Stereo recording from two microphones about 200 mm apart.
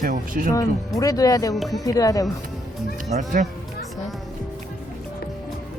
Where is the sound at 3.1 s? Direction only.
40° right (ahead or behind).